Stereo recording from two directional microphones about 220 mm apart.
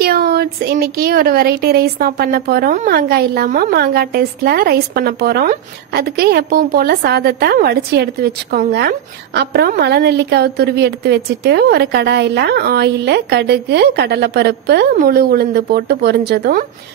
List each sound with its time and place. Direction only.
0.0 s speech: 45° right (ahead or behind)